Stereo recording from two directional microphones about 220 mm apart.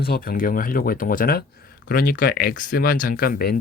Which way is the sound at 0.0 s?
40° left (ahead or behind).